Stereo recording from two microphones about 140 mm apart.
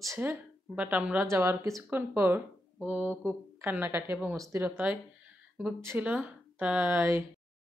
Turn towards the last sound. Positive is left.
turn(degrees=-20)  # may be behind; listen again after turning